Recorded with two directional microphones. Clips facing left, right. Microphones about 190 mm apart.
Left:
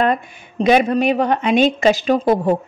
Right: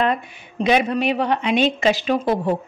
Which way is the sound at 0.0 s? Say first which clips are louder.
Left 3 dB; 45° left (ahead or behind).